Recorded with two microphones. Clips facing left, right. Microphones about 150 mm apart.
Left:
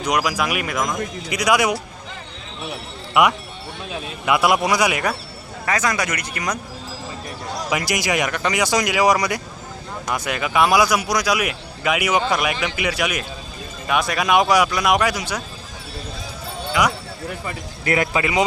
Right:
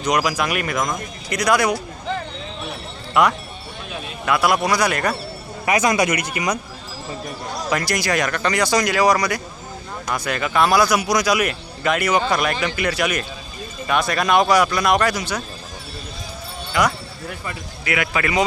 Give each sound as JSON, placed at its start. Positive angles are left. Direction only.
{"t": 0.0, "sound": "speech", "side_deg": 5}
{"t": 4.3, "sound": "a man's voice", "side_deg": 20}
{"t": 5.6, "sound": "speech", "side_deg": -15}
{"t": 7.7, "sound": "a man's voice", "side_deg": 15}
{"t": 16.8, "sound": "a man's voice", "side_deg": 10}
{"t": 17.8, "sound": "speech", "side_deg": 35}
{"t": 18.2, "sound": "a man's voice", "side_deg": 20}